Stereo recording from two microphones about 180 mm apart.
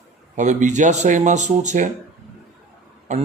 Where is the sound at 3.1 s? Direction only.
40° right (ahead or behind).